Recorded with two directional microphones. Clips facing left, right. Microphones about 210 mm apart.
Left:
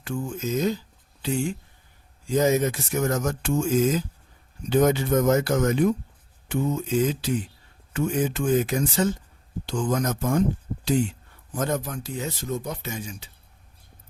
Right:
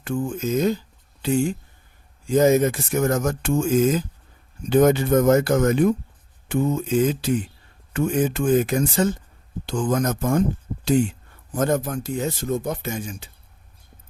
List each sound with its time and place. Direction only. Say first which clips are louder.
0.0 s speech: right 4 dB; 55° right (ahead or behind)
2.2 s speech: right 4 dB; 50° right (ahead or behind)
11.5 s speech: right 5 dB; 50° right (ahead or behind)